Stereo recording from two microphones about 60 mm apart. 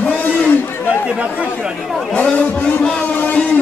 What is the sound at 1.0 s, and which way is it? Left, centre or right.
Chatter, centre.